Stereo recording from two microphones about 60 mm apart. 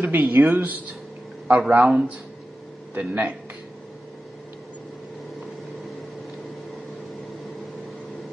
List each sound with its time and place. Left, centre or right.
0.0 s speech: right